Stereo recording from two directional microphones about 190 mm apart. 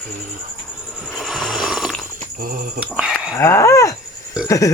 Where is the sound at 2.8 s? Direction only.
5° right (ahead or behind).